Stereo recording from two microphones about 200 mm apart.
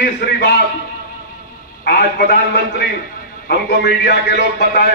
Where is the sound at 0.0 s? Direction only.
55° left (ahead or behind).